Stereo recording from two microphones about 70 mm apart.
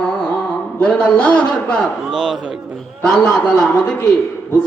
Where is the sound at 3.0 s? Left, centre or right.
Centre.